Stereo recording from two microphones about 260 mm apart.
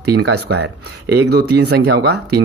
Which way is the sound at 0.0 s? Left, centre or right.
Right.